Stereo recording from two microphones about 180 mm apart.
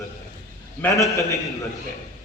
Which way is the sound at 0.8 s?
15° left (ahead or behind).